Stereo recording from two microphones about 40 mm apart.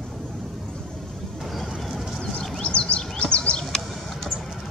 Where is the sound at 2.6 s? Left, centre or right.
Left.